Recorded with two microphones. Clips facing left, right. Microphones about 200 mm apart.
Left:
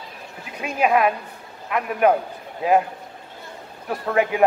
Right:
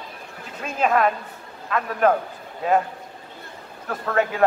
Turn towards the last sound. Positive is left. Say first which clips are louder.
# left 2 dB
turn(degrees=15)  # may be behind; listen again after turning